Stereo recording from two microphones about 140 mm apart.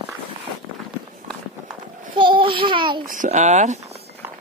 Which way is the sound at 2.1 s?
35° right (ahead or behind).